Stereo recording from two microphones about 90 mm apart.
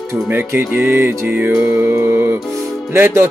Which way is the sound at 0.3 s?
25° right (ahead or behind).